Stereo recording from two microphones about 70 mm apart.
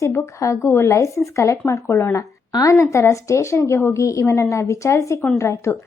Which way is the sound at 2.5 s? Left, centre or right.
Left.